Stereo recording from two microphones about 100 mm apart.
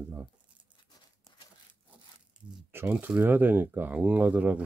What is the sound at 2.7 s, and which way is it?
Speech, 20° right (ahead or behind).